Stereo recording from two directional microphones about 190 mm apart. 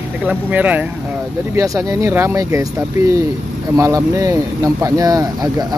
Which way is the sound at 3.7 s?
15° right (ahead or behind).